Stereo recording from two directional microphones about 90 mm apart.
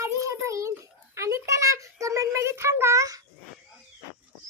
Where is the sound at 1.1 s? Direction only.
35° right (ahead or behind).